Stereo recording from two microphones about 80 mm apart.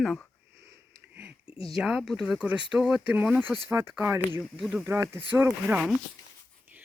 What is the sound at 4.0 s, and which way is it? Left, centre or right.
Speech, right.